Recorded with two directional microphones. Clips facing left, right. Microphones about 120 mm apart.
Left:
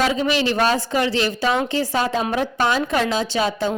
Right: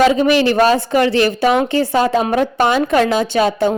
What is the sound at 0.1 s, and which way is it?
A woman's voice, 60° right (ahead or behind).